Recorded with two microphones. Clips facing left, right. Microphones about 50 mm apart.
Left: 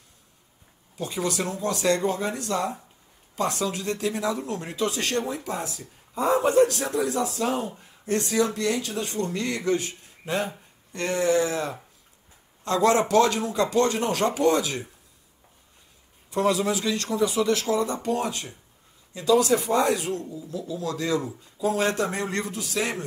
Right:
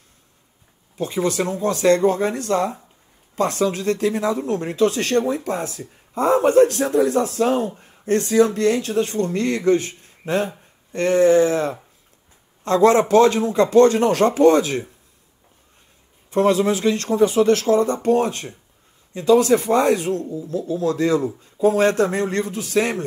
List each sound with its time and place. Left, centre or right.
0.9 s speech: right
16.3 s speech: right